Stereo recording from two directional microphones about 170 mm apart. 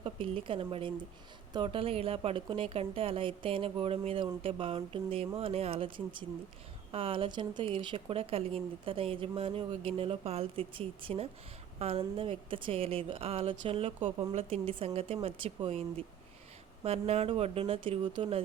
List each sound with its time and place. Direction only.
0.0 s speech: 30° right (ahead or behind)